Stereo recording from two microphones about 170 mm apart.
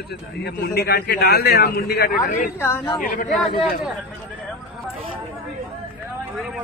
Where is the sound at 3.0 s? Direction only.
50° left (ahead or behind).